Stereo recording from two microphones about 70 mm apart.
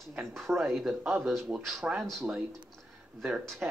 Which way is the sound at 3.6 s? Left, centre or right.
Centre.